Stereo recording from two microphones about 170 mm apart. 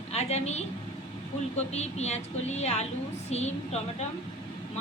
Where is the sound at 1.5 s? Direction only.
40° left (ahead or behind).